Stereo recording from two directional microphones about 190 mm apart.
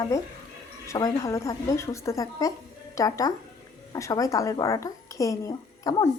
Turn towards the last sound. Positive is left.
turn(degrees=20)  # may be behind; listen again after turning